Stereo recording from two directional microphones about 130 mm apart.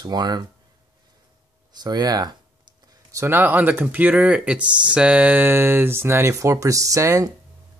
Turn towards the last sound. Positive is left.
turn(degrees=-25)  # may be behind; listen again after turning